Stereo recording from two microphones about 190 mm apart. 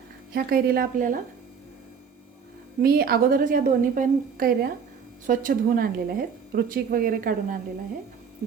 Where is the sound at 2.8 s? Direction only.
55° right (ahead or behind).